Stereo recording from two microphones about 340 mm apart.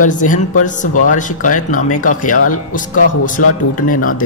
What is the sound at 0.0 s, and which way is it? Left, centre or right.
Speech, left.